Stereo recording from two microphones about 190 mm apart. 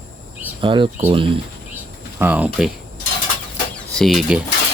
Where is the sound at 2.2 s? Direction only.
10° right (ahead or behind).